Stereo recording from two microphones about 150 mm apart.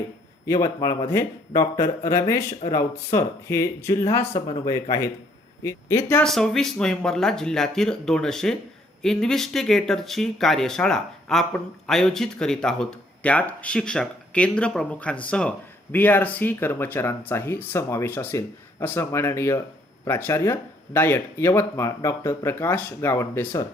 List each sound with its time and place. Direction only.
0.4 s speech: 20° left (ahead or behind)
6.2 s speech: 5° left (ahead or behind)